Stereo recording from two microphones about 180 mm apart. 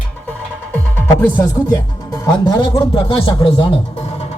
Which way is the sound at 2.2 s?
25° left (ahead or behind).